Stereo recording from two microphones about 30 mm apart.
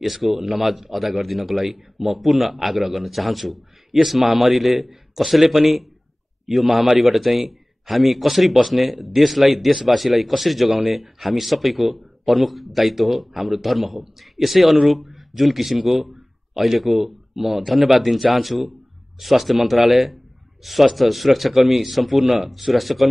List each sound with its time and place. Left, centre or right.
0.0 s a man's voice: centre